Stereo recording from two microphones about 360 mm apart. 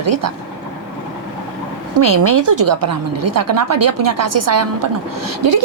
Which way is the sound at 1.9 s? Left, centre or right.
Right.